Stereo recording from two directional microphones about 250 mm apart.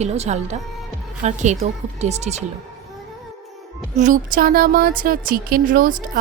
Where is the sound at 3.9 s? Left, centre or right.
Right.